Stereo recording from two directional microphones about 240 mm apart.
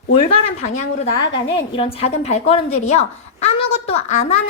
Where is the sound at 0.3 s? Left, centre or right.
Left.